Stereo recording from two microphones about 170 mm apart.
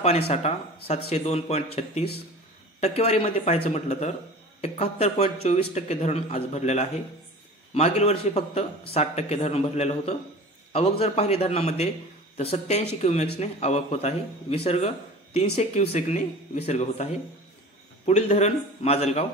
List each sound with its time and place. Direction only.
0.3 s speech: 40° left (ahead or behind)